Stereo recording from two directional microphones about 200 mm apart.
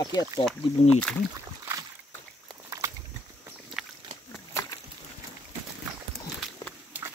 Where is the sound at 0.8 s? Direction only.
35° left (ahead or behind).